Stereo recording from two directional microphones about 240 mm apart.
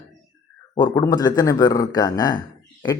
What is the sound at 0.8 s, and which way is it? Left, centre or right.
Speech, centre.